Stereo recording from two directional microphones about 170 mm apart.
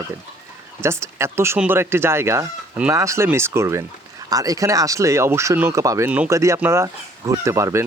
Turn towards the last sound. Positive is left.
turn(degrees=-15)  # may be behind; listen again after turning